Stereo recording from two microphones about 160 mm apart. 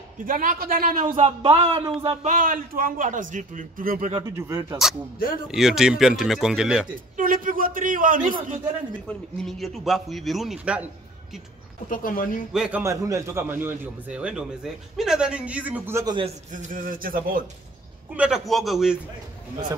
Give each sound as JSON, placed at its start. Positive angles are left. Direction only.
{"t": 0.2, "sound": "a man's voice", "side_deg": -55}
{"t": 1.1, "sound": "a sound", "side_deg": -35}
{"t": 2.2, "sound": "a man's voice", "side_deg": -55}
{"t": 4.4, "sound": "a man's voice", "side_deg": -15}
{"t": 5.5, "sound": "a man's voice", "side_deg": -5}
{"t": 7.2, "sound": "a man's voice", "side_deg": -60}
{"t": 9.0, "sound": "a man's voice", "side_deg": 5}
{"t": 11.9, "sound": "speech", "side_deg": 60}
{"t": 12.5, "sound": "a man's voice", "side_deg": -5}
{"t": 12.8, "sound": "a man's voice", "side_deg": -20}
{"t": 16.5, "sound": "a man's voice", "side_deg": -60}
{"t": 18.1, "sound": "a man's voice", "side_deg": -5}